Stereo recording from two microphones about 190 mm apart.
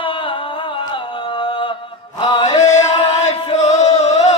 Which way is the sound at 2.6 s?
40° left (ahead or behind).